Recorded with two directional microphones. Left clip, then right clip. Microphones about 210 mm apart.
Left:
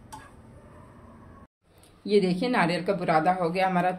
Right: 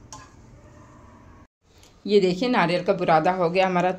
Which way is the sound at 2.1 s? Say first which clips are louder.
Right 4 dB; 20° right (ahead or behind).